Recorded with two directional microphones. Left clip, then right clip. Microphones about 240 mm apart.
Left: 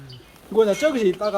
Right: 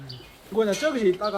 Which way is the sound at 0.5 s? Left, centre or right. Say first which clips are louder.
Left 5 dB; left.